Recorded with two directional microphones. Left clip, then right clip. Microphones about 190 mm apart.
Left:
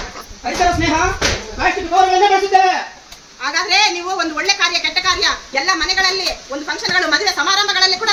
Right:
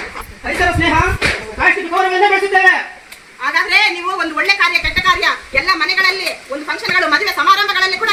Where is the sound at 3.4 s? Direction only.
20° left (ahead or behind).